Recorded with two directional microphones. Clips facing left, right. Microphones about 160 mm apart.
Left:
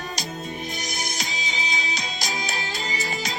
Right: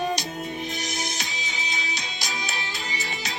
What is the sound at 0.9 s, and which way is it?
Music, 40° left (ahead or behind).